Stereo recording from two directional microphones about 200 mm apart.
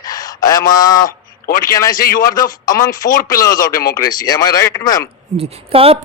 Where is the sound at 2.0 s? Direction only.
45° left (ahead or behind).